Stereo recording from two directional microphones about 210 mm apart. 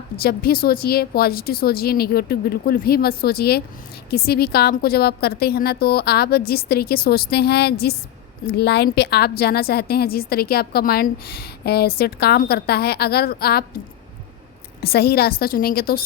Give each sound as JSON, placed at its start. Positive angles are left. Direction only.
{"t": 0.2, "sound": "a woman's voice", "side_deg": 45}
{"t": 14.8, "sound": "a woman's voice", "side_deg": 45}